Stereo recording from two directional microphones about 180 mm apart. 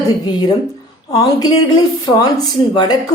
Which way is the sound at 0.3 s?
25° left (ahead or behind).